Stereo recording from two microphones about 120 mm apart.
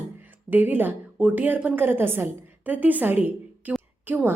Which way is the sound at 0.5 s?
15° right (ahead or behind).